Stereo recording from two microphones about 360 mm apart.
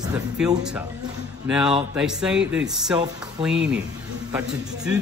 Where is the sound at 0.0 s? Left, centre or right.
Centre.